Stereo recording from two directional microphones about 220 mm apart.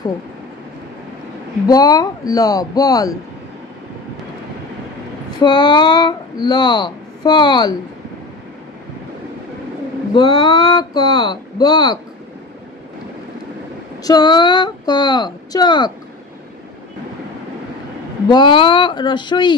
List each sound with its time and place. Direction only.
1.7 s speech: 15° left (ahead or behind)
5.4 s speech: 20° left (ahead or behind)
10.1 s speech: 20° left (ahead or behind)
14.0 s speech: 20° left (ahead or behind)
18.3 s speech: 20° left (ahead or behind)